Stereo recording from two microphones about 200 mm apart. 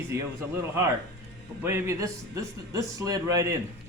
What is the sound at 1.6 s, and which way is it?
A man's voice, 10° right (ahead or behind).